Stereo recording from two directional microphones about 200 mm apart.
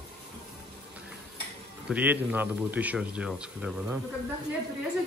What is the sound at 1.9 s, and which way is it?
Speech, 10° right (ahead or behind).